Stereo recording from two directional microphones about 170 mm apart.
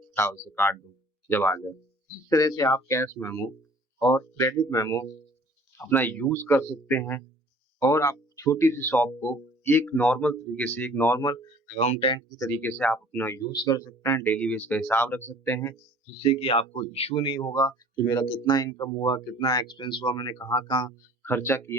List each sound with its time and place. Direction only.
0.2 s speech: 15° left (ahead or behind)
11.8 s speech: 40° left (ahead or behind)
12.5 s speech: 10° left (ahead or behind)
16.1 s speech: 35° left (ahead or behind)
21.2 s speech: 15° left (ahead or behind)